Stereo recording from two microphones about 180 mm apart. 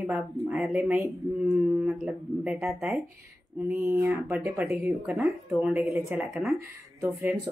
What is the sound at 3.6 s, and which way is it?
Speech, 15° right (ahead or behind).